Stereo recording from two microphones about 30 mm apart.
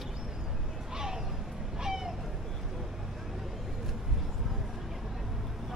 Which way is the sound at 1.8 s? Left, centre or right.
Centre.